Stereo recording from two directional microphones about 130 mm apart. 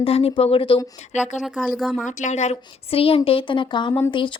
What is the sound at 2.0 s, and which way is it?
A woman's voice, 70° left (ahead or behind).